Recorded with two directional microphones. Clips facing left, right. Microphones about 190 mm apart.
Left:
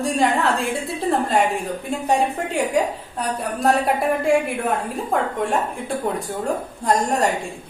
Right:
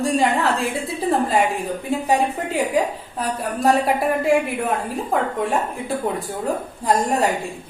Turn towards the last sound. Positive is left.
turn(degrees=-5)  # may be behind; listen again after turning